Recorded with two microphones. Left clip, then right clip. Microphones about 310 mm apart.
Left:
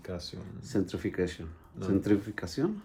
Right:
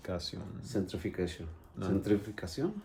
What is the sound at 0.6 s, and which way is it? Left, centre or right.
Speech, left.